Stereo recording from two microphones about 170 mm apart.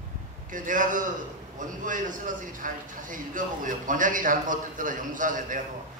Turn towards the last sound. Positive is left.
turn(degrees=-50)  # may be behind; listen again after turning